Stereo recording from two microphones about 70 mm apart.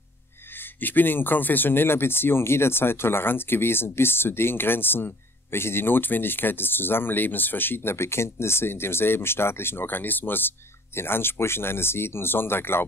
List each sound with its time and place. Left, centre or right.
0.6 s speech: left